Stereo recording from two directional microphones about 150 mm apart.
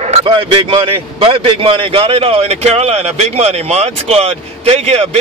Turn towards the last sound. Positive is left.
turn(degrees=-45)  # may be behind; listen again after turning